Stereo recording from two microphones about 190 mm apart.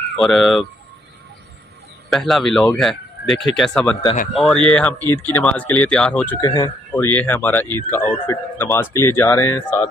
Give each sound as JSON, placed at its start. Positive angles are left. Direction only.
{"t": 0.2, "sound": "speech", "side_deg": 0}
{"t": 2.0, "sound": "speech", "side_deg": 0}
{"t": 6.4, "sound": "speech", "side_deg": 25}
{"t": 6.9, "sound": "speech", "side_deg": 10}